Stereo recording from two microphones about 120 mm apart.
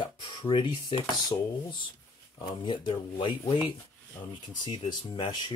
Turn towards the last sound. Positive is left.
turn(degrees=35)  # may be behind; listen again after turning